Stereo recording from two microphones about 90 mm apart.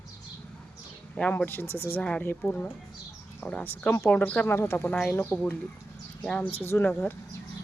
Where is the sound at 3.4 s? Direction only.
20° left (ahead or behind).